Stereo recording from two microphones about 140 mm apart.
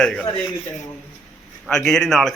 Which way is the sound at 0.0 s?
5° left (ahead or behind).